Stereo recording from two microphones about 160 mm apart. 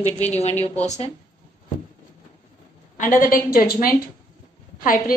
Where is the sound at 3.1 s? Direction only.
60° left (ahead or behind).